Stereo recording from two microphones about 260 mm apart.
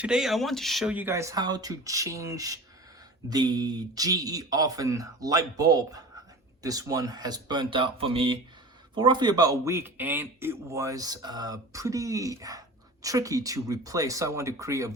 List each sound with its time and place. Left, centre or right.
0.0 s speech: centre